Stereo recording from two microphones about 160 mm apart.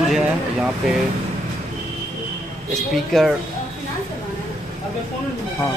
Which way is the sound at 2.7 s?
Centre (ahead or behind).